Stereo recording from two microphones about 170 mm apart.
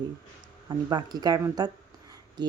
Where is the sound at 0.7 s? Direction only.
25° right (ahead or behind).